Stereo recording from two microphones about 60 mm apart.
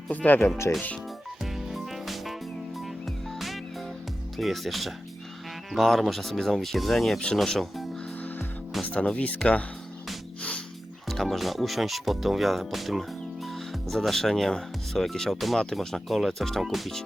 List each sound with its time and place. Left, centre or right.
0.1 s speech: left
1.4 s music: centre
4.4 s speech: centre
8.8 s music: left
9.1 s speech: left
11.1 s speech: centre